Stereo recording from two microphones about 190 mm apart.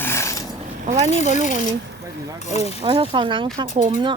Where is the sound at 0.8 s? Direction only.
35° right (ahead or behind).